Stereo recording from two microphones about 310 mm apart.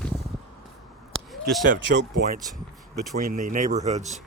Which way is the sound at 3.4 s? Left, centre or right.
Right.